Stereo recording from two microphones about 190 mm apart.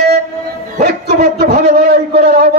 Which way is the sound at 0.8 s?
55° right (ahead or behind).